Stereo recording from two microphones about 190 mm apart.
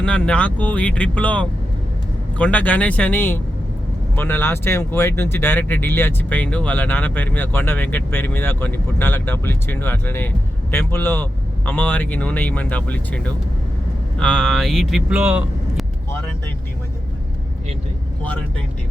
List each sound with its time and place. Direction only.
0.0 s speech: 5° left (ahead or behind)
18.2 s speech: 5° left (ahead or behind)